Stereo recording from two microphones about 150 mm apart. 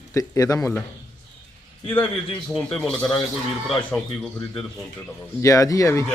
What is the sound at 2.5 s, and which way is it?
Speech, 5° left (ahead or behind).